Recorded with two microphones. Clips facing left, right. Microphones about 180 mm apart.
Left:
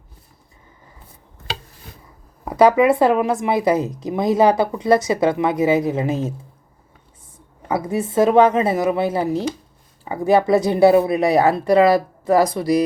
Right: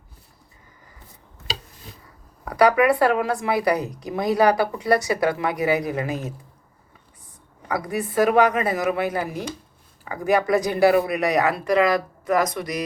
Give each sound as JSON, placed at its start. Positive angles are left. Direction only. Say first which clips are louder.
{"t": 2.4, "sound": "speech", "louder": "left 4 dB", "side_deg": 25}
{"t": 7.7, "sound": "speech", "louder": "left 4 dB", "side_deg": 25}